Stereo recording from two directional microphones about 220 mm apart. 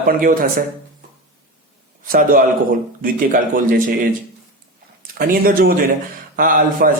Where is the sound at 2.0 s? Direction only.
40° right (ahead or behind).